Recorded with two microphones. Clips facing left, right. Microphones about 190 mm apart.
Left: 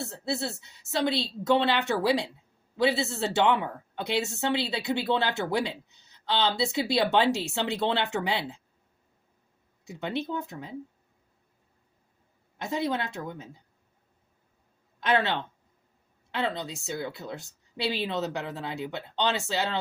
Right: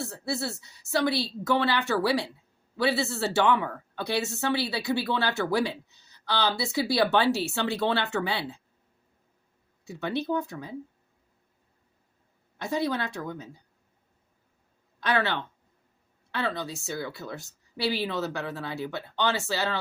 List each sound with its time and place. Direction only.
0.0 s a woman's voice: 20° left (ahead or behind)
9.8 s a woman's voice: 20° left (ahead or behind)
12.5 s a woman's voice: 20° left (ahead or behind)
15.0 s a woman's voice: 20° left (ahead or behind)